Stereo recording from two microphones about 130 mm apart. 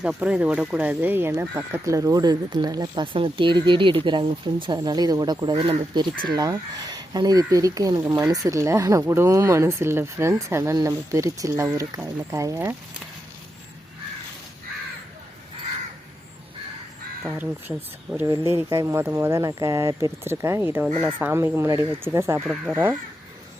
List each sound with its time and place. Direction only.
0.0 s speech: 5° right (ahead or behind)
17.3 s speech: 15° right (ahead or behind)